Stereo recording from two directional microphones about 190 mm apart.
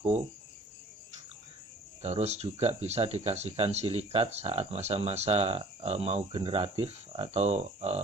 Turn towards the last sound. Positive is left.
turn(degrees=-35)  # may be behind; listen again after turning